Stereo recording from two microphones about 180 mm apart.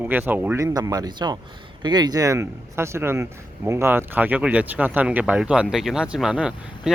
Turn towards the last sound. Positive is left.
turn(degrees=-5)  # may be behind; listen again after turning